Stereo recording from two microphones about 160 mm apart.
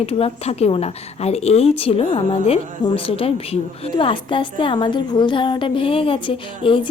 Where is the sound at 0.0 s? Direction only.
40° left (ahead or behind).